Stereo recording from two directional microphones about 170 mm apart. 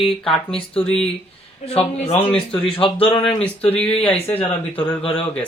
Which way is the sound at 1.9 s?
40° left (ahead or behind).